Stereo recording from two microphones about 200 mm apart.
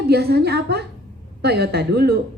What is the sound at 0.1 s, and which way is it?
A woman's voice, 55° right (ahead or behind).